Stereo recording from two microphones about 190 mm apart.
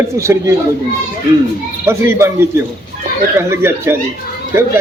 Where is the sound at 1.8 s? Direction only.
10° right (ahead or behind).